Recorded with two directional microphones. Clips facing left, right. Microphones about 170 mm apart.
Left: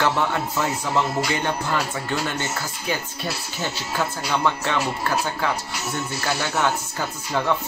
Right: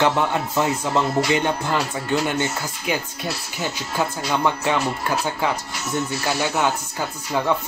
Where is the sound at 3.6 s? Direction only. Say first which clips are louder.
Right 2 dB; 15° right (ahead or behind).